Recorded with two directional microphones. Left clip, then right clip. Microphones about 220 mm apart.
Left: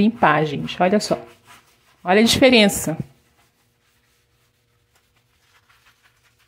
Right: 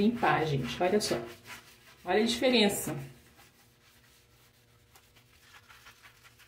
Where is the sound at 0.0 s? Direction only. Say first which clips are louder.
Left 11 dB; 50° left (ahead or behind).